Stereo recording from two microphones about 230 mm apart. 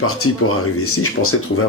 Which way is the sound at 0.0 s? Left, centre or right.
Left.